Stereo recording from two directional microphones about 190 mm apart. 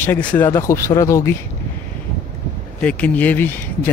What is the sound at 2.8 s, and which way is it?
Speech, 5° left (ahead or behind).